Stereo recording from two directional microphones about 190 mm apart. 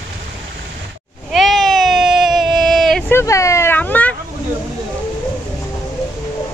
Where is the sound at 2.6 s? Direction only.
Centre (ahead or behind).